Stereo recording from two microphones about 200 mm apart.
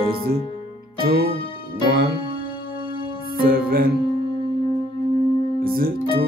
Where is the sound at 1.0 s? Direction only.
50° right (ahead or behind).